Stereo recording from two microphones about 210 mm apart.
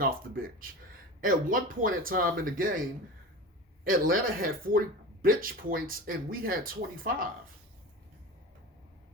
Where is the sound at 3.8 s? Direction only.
40° right (ahead or behind).